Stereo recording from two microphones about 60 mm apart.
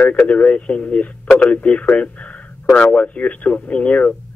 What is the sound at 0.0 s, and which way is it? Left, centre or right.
Speech, left.